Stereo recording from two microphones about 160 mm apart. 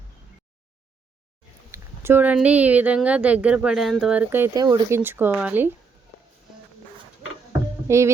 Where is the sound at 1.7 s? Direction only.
15° right (ahead or behind).